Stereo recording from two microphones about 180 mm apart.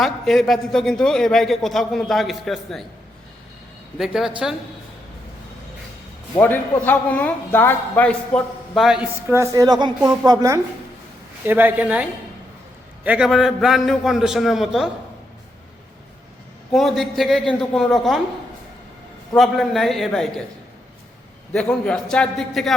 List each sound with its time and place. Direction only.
0.0 s a man's voice: centre (ahead or behind)
3.9 s a man's voice: centre (ahead or behind)
6.4 s a man's voice: 10° left (ahead or behind)
9.3 s a woman's voice: 15° right (ahead or behind)
13.1 s a man's voice: 5° right (ahead or behind)
16.7 s a man's voice: centre (ahead or behind)
19.4 s a man's voice: centre (ahead or behind)
21.5 s a man's voice: 5° left (ahead or behind)